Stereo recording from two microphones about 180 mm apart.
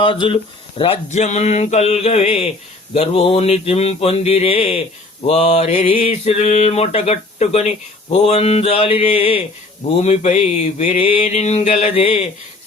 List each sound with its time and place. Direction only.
0.0 s speech: 30° left (ahead or behind)
0.8 s mantra: 35° left (ahead or behind)